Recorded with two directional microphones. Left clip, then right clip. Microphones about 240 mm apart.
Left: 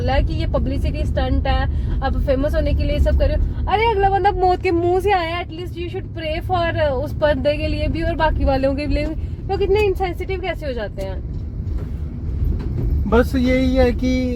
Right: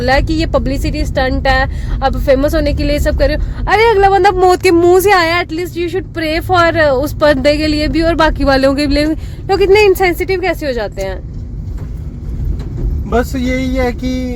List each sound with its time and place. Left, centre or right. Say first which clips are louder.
0.0 s speech: right 10 dB; right
13.1 s speech: right 2 dB; centre